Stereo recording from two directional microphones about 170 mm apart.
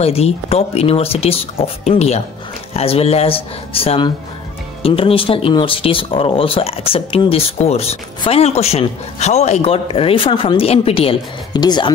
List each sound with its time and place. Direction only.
0.0 s speech: 35° left (ahead or behind)